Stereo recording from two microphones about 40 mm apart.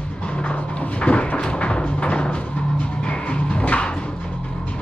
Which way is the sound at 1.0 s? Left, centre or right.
Left.